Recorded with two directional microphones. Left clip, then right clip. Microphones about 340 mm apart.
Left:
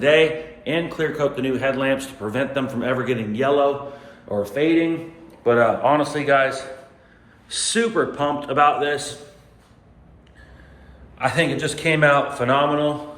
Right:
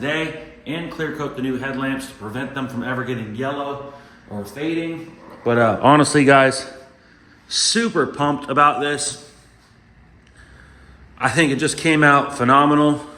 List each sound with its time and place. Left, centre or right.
0.0 s a man's voice: centre
5.5 s a man's voice: right
11.2 s a man's voice: centre